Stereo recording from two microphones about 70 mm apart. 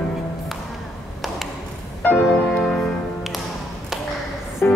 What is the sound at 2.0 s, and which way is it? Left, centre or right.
Music, centre.